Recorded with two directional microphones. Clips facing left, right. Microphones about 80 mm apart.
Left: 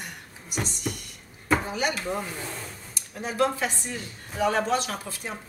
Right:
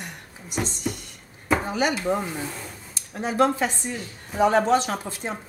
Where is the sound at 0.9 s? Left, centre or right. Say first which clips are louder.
Right 3 dB; centre.